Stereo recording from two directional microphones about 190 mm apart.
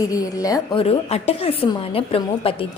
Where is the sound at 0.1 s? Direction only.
20° left (ahead or behind).